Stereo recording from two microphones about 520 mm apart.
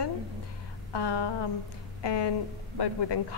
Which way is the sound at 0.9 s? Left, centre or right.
Left.